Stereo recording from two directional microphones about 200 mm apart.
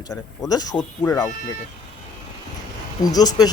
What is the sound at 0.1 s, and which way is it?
Speech, 20° left (ahead or behind).